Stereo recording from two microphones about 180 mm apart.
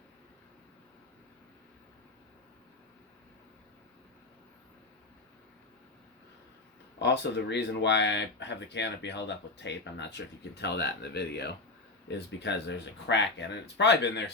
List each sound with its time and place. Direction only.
7.0 s speech: 70° left (ahead or behind)